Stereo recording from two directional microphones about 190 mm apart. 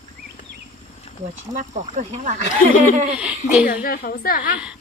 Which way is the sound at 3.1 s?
5° right (ahead or behind).